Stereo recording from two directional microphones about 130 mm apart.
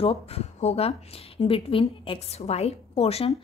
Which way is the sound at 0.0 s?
50° left (ahead or behind).